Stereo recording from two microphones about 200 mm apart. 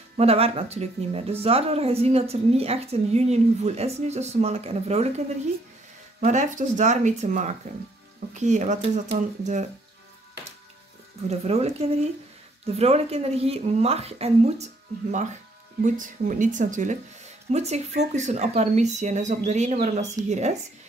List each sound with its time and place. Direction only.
0.2 s speech: 30° right (ahead or behind)
6.2 s speech: 40° right (ahead or behind)
11.2 s speech: 30° right (ahead or behind)